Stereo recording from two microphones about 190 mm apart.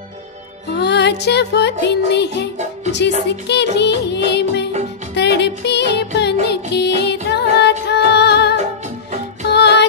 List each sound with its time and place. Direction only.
0.7 s music: 65° left (ahead or behind)